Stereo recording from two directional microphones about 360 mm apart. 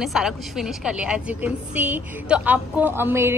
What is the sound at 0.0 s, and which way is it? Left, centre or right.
A woman's voice, centre.